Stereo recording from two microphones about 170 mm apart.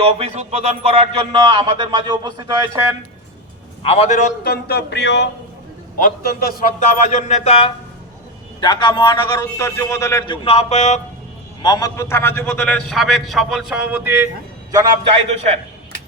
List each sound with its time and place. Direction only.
0.0 s speech: 35° right (ahead or behind); by 2.9 s 20° right (ahead or behind)
3.8 s speech: 35° left (ahead or behind)
4.4 s speech: 70° left (ahead or behind); by 5.3 s 85° left
6.0 s a man's voice: 60° left (ahead or behind); by 7.7 s 35° left (ahead or behind)
8.6 s a man's voice: 25° left (ahead or behind)
10.4 s speech: 40° left (ahead or behind)
11.6 s a man's voice: 25° left (ahead or behind); by 14.3 s 10° right (ahead or behind)
14.7 s speech: 20° right (ahead or behind)